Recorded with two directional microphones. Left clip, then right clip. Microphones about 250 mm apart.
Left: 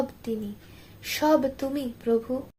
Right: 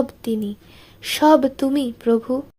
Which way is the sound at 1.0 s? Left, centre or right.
Right.